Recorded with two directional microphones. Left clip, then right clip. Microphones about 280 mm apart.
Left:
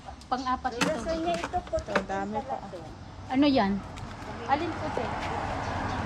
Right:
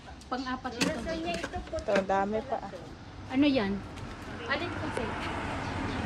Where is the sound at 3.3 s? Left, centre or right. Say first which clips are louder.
Left 3 dB; left.